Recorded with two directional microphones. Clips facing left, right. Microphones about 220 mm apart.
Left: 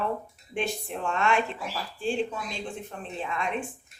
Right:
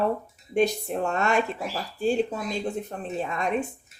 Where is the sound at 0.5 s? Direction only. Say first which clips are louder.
Right 8 dB; 40° right (ahead or behind).